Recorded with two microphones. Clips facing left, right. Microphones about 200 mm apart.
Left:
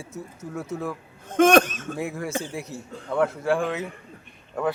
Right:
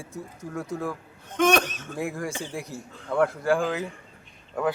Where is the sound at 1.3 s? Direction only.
50° left (ahead or behind).